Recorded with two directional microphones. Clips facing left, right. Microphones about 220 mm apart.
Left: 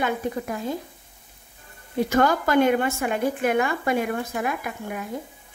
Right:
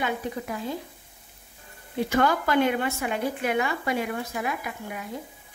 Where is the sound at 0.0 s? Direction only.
45° left (ahead or behind).